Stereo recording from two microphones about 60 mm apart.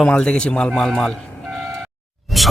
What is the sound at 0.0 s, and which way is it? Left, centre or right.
A man's voice, centre.